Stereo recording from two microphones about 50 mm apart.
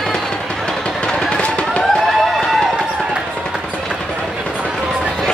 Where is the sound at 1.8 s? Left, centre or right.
Centre.